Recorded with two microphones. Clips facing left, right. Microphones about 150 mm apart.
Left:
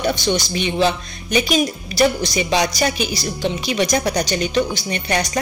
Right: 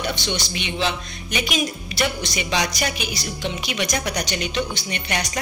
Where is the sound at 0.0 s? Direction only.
40° left (ahead or behind).